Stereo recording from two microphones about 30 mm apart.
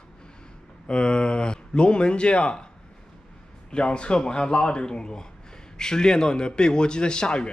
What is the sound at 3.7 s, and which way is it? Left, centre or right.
Speech, left.